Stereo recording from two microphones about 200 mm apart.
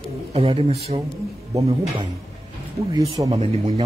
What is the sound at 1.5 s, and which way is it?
Speech, 15° right (ahead or behind).